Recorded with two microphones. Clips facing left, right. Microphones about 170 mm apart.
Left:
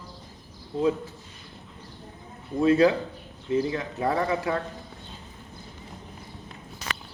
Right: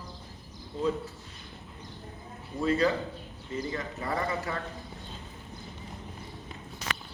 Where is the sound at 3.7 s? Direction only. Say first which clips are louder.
Left 6 dB; 80° left.